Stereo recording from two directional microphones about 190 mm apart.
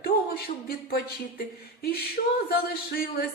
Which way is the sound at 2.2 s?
55° left (ahead or behind).